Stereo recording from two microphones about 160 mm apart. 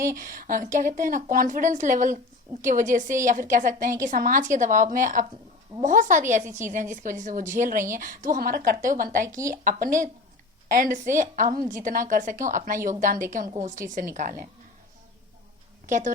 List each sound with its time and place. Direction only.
0.2 s a woman's voice: 60° right (ahead or behind)
9.2 s speech: 20° right (ahead or behind)
9.6 s a woman's voice: 55° right (ahead or behind)
15.9 s a woman's voice: 50° right (ahead or behind)